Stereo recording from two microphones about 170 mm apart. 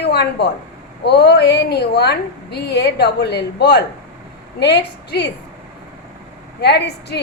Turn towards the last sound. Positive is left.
turn(degrees=75)  # may be behind; listen again after turning